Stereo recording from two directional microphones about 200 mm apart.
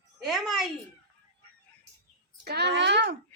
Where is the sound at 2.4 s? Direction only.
55° right (ahead or behind).